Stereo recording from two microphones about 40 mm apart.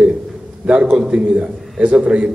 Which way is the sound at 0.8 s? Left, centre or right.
Right.